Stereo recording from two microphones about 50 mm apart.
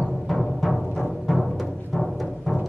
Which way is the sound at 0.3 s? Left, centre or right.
Centre.